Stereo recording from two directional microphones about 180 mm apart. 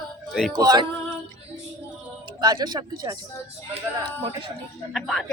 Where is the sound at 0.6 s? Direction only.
20° right (ahead or behind).